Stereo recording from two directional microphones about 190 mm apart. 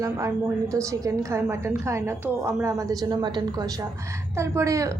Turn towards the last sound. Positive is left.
turn(degrees=-15)  # may be behind; listen again after turning